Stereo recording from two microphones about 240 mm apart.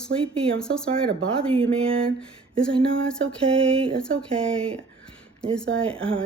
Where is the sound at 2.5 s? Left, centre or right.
Centre.